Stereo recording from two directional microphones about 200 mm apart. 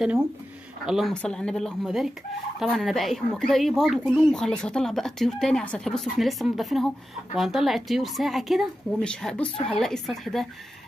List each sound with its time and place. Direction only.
0.8 s speech: centre (ahead or behind)